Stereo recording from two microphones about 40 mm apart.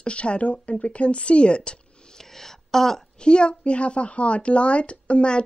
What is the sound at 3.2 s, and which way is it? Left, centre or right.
A woman's voice, left.